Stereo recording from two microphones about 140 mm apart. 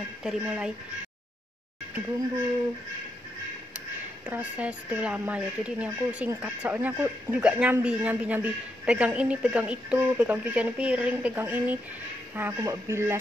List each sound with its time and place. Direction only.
0.2 s speech: 5° right (ahead or behind)
4.3 s speech: 10° right (ahead or behind)